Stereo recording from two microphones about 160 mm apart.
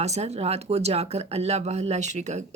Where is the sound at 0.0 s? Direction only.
45° right (ahead or behind).